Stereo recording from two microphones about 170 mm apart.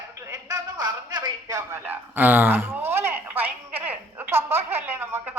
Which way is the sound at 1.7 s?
10° right (ahead or behind).